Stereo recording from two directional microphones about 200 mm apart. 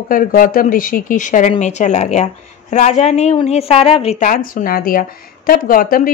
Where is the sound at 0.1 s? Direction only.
45° left (ahead or behind).